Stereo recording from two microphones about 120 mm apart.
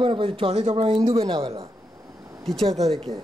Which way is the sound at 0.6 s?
60° right (ahead or behind).